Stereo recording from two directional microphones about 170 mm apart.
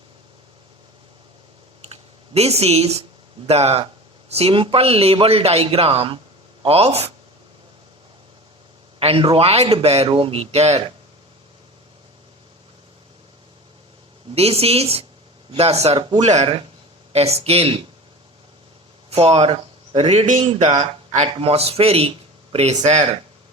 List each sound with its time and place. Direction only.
1.9 s a sound: 40° right (ahead or behind)
3.4 s a man's voice: 35° right (ahead or behind)
9.0 s a man's voice: 35° right (ahead or behind)
14.3 s a man's voice: 35° right (ahead or behind)
16.2 s a man's voice: 40° right (ahead or behind)
19.1 s a man's voice: 35° right (ahead or behind)